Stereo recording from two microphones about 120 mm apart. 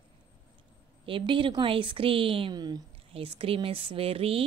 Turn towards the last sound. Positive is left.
turn(degrees=-55)  # may be behind; listen again after turning